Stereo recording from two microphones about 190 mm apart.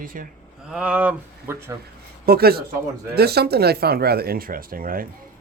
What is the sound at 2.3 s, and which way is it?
Speech, 55° right (ahead or behind).